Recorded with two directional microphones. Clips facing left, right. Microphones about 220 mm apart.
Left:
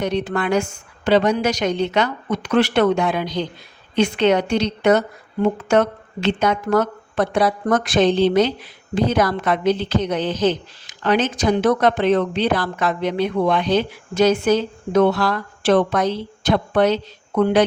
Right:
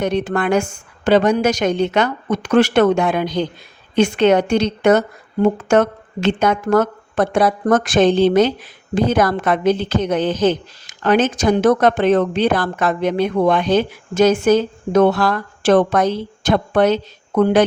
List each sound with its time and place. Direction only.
0.0 s a woman's voice: 50° right (ahead or behind)